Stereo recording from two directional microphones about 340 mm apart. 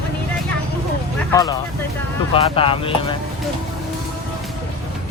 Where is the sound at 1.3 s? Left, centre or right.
Centre.